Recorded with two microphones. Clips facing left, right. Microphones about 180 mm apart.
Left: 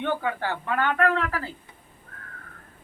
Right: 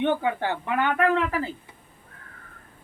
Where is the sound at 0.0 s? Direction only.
20° right (ahead or behind).